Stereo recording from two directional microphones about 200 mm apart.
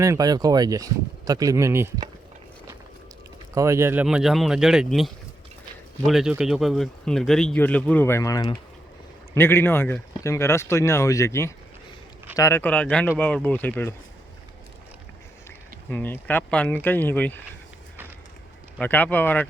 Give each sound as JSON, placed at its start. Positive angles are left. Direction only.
{"t": 0.0, "sound": "speech", "side_deg": -15}
{"t": 3.5, "sound": "speech", "side_deg": -15}
{"t": 15.9, "sound": "speech", "side_deg": 10}
{"t": 18.8, "sound": "speech", "side_deg": 10}